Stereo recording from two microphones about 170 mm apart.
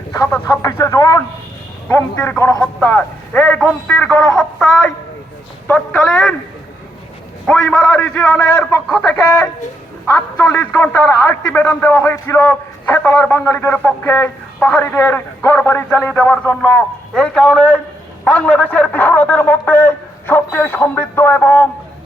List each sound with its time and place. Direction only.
0.3 s a man's voice: 10° left (ahead or behind)
7.4 s a man's voice: 5° left (ahead or behind)